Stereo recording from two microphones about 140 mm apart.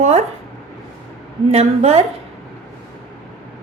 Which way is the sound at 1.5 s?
50° right (ahead or behind).